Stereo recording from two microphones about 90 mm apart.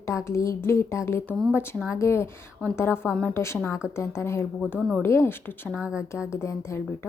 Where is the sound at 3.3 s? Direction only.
30° left (ahead or behind).